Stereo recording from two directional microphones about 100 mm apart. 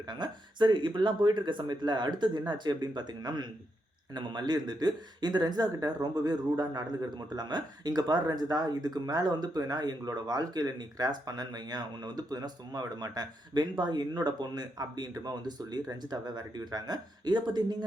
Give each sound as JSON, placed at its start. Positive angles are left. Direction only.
{"t": 0.1, "sound": "a man's voice", "side_deg": -45}